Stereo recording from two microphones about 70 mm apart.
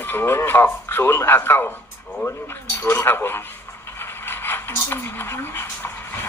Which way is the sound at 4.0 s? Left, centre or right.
Left.